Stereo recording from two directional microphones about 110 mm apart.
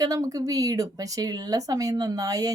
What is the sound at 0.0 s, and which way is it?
Speech, 30° right (ahead or behind).